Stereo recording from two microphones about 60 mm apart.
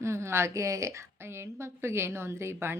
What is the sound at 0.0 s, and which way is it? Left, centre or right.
Speech, right.